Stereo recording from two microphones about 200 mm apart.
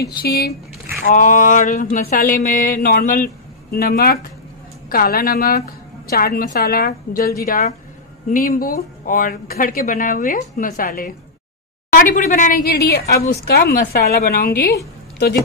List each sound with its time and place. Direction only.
0.0 s speech: 50° left (ahead or behind)